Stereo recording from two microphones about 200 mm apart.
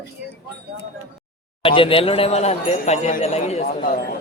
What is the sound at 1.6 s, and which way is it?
Speech, 25° left (ahead or behind).